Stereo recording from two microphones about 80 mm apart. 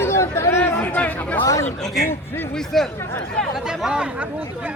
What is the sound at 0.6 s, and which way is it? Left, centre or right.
Speech, left.